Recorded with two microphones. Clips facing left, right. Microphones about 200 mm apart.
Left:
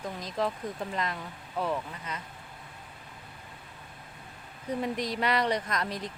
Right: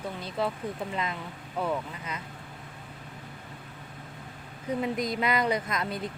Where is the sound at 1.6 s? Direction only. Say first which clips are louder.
Right 1 dB; 10° right (ahead or behind).